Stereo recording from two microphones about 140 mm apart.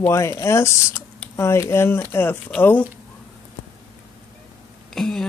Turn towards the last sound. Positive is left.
turn(degrees=0)  # may be behind; listen again after turning